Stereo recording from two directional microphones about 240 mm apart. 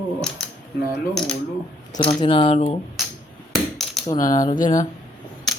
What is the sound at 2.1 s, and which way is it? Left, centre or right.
Speech, centre.